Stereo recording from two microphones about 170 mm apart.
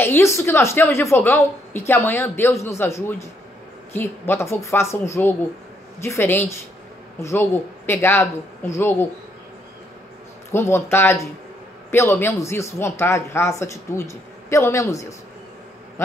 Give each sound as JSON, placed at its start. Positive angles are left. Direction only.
{"t": 0.0, "sound": "speech", "side_deg": 15}
{"t": 10.5, "sound": "speech", "side_deg": 15}